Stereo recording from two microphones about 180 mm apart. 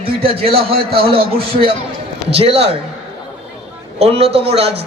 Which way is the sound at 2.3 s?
35° right (ahead or behind).